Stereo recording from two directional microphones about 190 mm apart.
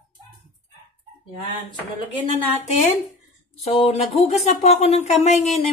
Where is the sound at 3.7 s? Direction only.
30° left (ahead or behind).